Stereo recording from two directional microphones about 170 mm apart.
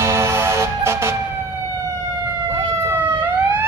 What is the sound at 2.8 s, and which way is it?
Police car, 15° right (ahead or behind).